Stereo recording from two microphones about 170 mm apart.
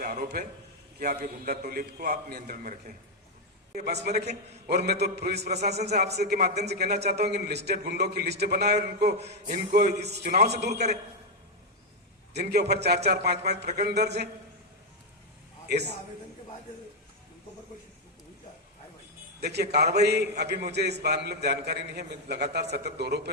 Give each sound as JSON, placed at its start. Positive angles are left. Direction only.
{"t": 0.0, "sound": "a sound", "side_deg": -65}
{"t": 0.9, "sound": "a man's voice", "side_deg": -60}
{"t": 3.8, "sound": "a man's voice", "side_deg": -70}
{"t": 5.4, "sound": "a man's voice", "side_deg": -40}
{"t": 6.1, "sound": "a man's voice", "side_deg": -70}
{"t": 9.3, "sound": "a man's voice", "side_deg": -50}
{"t": 12.3, "sound": "a man's voice", "side_deg": -70}
{"t": 19.4, "sound": "a man's voice", "side_deg": -75}